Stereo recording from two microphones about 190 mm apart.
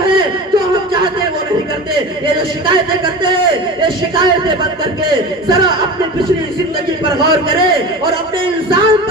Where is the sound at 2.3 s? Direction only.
25° right (ahead or behind).